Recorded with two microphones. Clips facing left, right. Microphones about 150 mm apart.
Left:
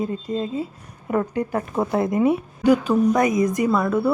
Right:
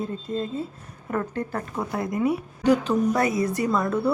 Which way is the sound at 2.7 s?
10° left (ahead or behind).